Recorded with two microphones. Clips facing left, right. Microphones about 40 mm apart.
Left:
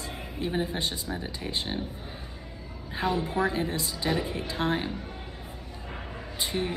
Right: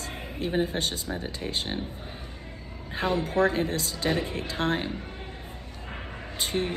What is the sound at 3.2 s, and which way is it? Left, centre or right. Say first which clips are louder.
Speech: right 3 dB; right.